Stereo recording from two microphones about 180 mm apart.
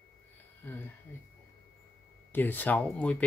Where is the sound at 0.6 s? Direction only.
10° left (ahead or behind).